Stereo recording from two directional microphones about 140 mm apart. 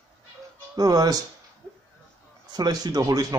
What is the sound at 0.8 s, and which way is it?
Speech, 25° right (ahead or behind).